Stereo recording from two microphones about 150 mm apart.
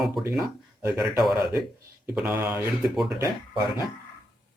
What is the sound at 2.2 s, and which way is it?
Speech, 15° right (ahead or behind).